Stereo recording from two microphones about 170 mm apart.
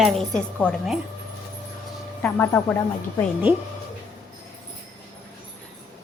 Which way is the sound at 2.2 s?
10° left (ahead or behind).